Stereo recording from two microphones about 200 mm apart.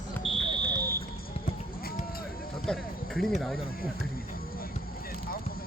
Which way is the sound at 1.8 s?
50° left (ahead or behind).